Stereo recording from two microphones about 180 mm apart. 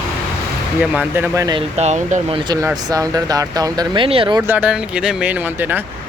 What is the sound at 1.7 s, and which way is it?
Speech, 40° right (ahead or behind).